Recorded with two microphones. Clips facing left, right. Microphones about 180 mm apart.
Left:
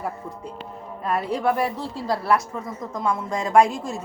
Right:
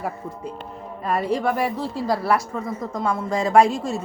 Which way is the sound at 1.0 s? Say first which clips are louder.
Right 1 dB; centre (ahead or behind).